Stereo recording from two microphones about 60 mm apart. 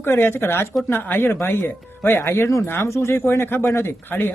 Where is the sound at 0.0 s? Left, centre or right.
Left.